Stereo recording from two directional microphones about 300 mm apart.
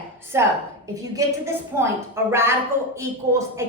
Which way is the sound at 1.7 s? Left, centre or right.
Centre.